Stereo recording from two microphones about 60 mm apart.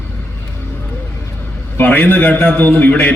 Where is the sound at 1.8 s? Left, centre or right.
Left.